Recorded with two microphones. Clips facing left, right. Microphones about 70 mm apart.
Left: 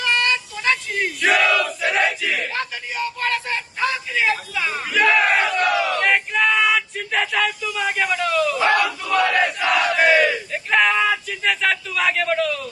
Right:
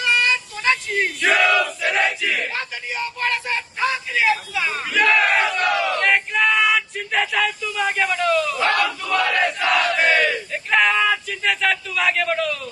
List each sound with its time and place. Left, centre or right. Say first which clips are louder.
0.0 s child singing: right 1 dB; centre
1.2 s battle cry: even; centre
2.5 s a sound: left 1 dB; centre
4.9 s battle cry: left 1 dB; centre